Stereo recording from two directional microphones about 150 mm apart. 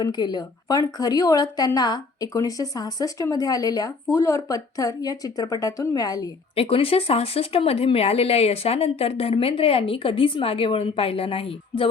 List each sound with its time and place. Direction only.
0.0 s a woman's voice: 30° left (ahead or behind)
6.6 s speech: 40° left (ahead or behind)